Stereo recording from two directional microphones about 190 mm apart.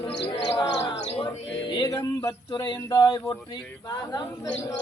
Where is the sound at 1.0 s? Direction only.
30° left (ahead or behind).